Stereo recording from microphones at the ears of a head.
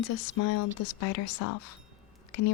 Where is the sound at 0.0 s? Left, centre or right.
Left.